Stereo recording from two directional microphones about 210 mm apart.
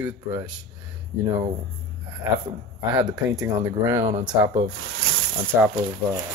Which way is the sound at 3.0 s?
20° right (ahead or behind).